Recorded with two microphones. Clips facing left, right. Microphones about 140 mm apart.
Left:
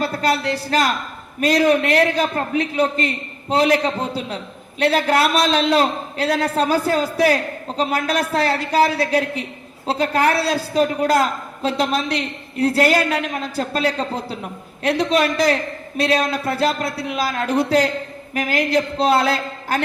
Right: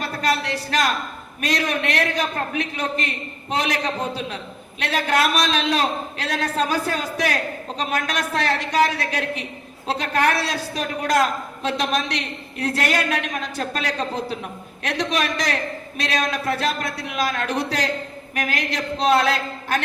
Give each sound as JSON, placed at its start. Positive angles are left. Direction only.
{"t": 0.0, "sound": "a man's voice", "side_deg": 30}